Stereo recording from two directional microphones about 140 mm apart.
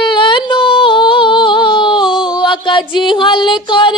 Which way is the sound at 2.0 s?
5° right (ahead or behind).